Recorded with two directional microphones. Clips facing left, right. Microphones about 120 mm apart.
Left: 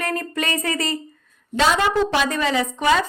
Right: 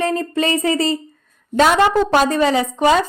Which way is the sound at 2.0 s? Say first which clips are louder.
Right 6 dB; 40° right (ahead or behind).